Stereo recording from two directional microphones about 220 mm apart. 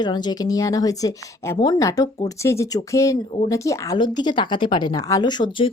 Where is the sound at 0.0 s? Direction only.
20° left (ahead or behind).